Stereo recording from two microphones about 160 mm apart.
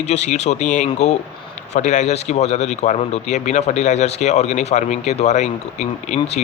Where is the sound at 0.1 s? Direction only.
45° left (ahead or behind).